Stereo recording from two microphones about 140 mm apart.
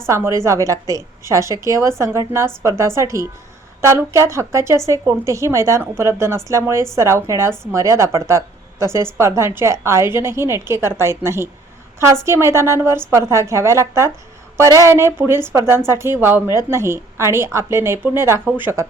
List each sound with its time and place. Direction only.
0.1 s a woman's voice: 20° right (ahead or behind)